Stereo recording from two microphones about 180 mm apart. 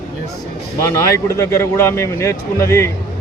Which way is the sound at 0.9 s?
15° left (ahead or behind).